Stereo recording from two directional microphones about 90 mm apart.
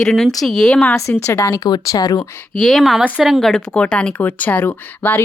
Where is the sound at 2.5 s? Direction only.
Centre (ahead or behind).